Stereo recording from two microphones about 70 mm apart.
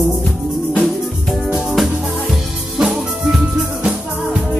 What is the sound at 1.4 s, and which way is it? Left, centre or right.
Music, centre.